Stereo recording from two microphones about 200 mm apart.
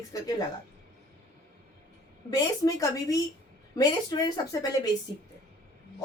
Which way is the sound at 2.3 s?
15° left (ahead or behind).